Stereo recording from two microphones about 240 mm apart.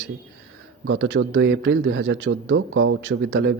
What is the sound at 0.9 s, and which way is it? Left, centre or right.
A man's voice, right.